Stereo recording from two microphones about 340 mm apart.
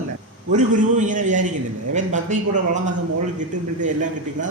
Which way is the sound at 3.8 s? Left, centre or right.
Right.